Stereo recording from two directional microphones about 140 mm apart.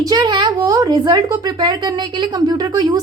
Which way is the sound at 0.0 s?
30° right (ahead or behind).